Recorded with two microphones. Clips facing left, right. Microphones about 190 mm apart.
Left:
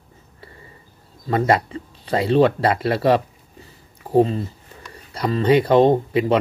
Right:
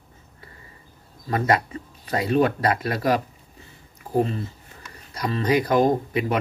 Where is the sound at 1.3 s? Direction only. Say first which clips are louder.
Left 4 dB; 25° left (ahead or behind).